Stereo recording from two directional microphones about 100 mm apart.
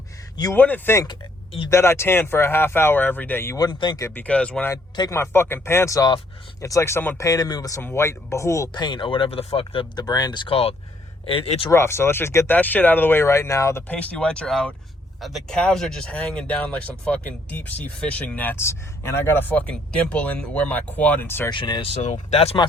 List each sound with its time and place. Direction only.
0.5 s speech: 20° left (ahead or behind)
3.6 s speech: 45° left (ahead or behind)
4.0 s speech: 15° left (ahead or behind)
5.1 s speech: 25° left (ahead or behind)
7.2 s speech: 35° left (ahead or behind)
7.8 s speech: 25° left (ahead or behind)
8.7 s speech: 50° left (ahead or behind); by 9.8 s 85° left
9.9 s speech: 40° left (ahead or behind)
11.3 s speech: 75° left (ahead or behind)
11.7 s speech: 25° left (ahead or behind)
13.8 s speech: 15° left (ahead or behind)
21.5 s speech: 55° left (ahead or behind); by 22.5 s 90° left